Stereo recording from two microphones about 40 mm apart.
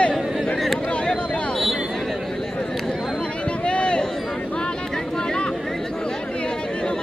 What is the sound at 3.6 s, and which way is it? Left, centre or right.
Run, left.